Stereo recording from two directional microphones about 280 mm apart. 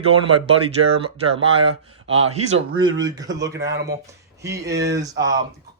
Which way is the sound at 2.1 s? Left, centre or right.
Right.